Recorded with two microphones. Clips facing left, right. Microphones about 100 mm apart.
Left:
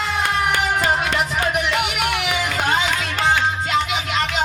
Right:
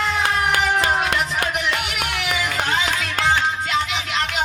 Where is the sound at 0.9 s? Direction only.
5° left (ahead or behind).